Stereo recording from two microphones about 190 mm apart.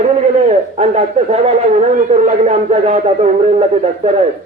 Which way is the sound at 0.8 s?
35° right (ahead or behind).